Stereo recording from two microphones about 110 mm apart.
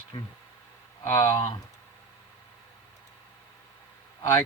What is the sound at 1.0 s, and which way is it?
Speech, 25° left (ahead or behind).